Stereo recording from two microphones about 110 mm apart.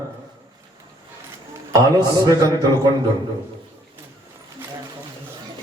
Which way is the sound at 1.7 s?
35° right (ahead or behind).